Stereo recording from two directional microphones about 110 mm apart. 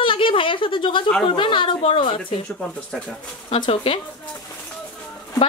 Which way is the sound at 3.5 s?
60° left (ahead or behind).